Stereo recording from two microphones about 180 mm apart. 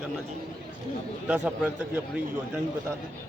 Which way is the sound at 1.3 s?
5° right (ahead or behind).